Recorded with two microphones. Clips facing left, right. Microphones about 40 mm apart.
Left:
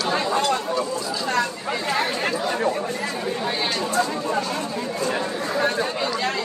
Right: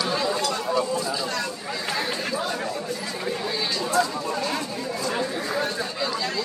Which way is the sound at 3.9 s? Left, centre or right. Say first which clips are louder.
Even; left.